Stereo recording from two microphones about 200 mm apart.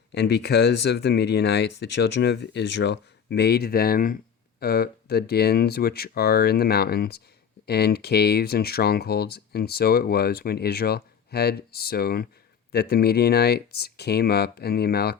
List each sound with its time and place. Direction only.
0.1 s speech: 55° left (ahead or behind)